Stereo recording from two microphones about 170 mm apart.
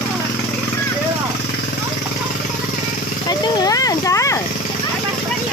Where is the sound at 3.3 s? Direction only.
20° left (ahead or behind).